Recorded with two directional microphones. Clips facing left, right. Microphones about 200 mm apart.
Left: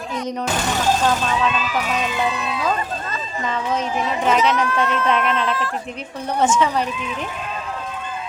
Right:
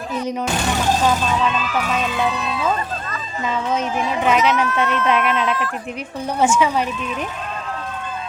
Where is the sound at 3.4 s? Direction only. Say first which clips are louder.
Right 2 dB; 5° right (ahead or behind).